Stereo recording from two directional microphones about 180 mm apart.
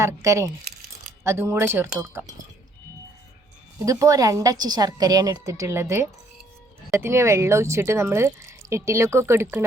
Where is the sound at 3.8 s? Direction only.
20° right (ahead or behind).